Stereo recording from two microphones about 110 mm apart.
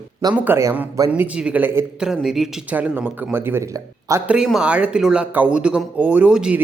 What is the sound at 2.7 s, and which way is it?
Speech, 15° right (ahead or behind).